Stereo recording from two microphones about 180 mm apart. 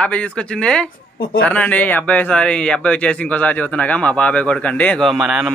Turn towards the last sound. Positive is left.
turn(degrees=0)  # may be behind; listen again after turning